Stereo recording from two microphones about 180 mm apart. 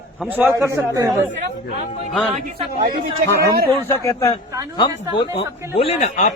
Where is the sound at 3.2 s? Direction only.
15° left (ahead or behind).